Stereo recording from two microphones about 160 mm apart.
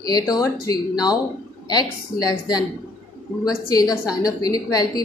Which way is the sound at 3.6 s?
20° left (ahead or behind).